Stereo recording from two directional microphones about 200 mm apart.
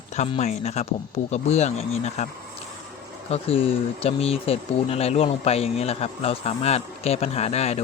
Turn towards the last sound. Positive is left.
turn(degrees=30)  # may be behind; listen again after turning